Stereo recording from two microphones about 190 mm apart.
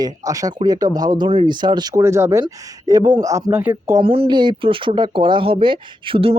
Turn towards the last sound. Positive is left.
turn(degrees=-30)  # may be behind; listen again after turning